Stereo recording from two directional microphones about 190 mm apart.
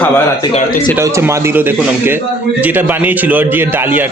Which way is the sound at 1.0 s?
15° right (ahead or behind).